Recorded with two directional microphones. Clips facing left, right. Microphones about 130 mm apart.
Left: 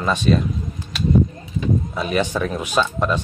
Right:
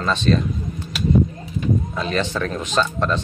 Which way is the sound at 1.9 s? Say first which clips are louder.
Left 2 dB; 10° left (ahead or behind).